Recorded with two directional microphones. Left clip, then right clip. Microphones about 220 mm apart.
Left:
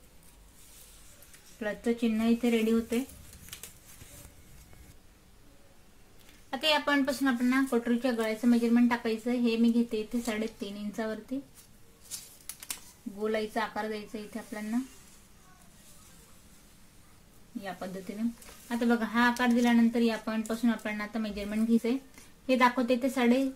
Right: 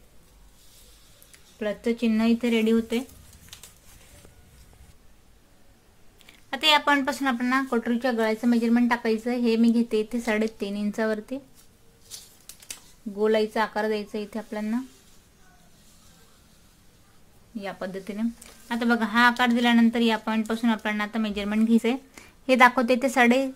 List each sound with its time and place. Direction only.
1.6 s a woman's voice: 40° right (ahead or behind)
6.5 s a woman's voice: 30° right (ahead or behind); by 11.3 s 45° right (ahead or behind)
13.2 s speech: 45° right (ahead or behind)
18.7 s a woman's voice: 30° right (ahead or behind)